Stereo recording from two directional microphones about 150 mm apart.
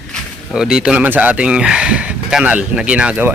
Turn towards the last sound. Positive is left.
turn(degrees=-10)  # may be behind; listen again after turning